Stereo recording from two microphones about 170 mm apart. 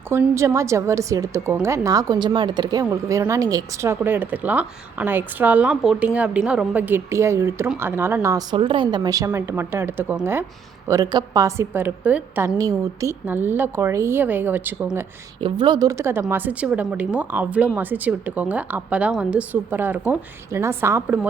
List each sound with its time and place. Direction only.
0.1 s speech: 15° right (ahead or behind)
15.4 s speech: 30° right (ahead or behind); by 21.2 s 15° right (ahead or behind)